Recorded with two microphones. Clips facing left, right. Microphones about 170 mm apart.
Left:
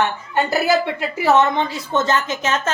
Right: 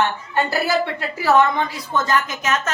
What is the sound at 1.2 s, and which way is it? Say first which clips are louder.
A woman's voice: left 1 dB; 20° left (ahead or behind).